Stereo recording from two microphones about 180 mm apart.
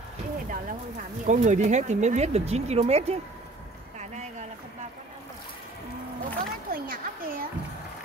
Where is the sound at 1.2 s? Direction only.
45° right (ahead or behind).